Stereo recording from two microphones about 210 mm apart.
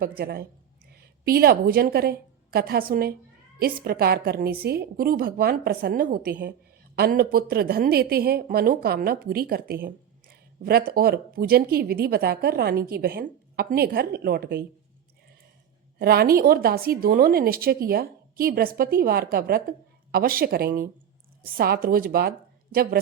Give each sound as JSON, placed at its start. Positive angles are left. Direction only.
{"t": 0.2, "sound": "a woman's voice", "side_deg": -50}
{"t": 16.0, "sound": "a woman's voice", "side_deg": -45}